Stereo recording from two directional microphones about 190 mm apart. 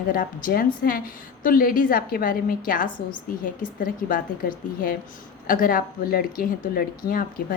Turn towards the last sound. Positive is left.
turn(degrees=50)  # may be behind; listen again after turning